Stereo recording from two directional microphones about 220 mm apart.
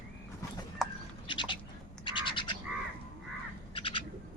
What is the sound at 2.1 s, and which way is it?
Frog, 20° left (ahead or behind).